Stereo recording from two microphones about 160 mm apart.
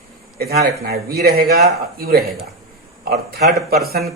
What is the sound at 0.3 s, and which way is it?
A man's voice, 75° right (ahead or behind).